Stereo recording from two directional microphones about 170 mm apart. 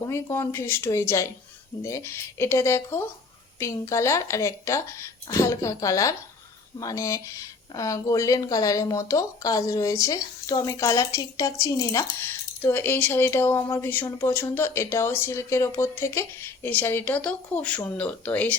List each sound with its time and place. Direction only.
0.0 s speech: 15° left (ahead or behind)